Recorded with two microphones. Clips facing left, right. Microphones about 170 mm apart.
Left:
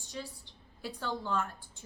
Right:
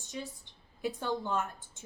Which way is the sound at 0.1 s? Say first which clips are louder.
Right 1 dB; 15° right (ahead or behind).